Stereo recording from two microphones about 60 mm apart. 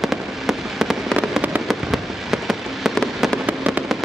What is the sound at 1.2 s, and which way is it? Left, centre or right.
Fireworks, right.